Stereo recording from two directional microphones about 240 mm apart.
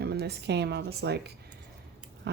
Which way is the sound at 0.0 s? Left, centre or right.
Right.